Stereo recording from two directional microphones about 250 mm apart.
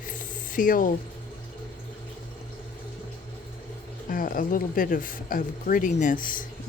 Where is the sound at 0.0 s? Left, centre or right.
Left.